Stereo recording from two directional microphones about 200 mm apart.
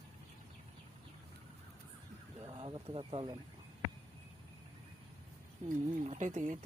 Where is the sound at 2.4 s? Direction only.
20° right (ahead or behind).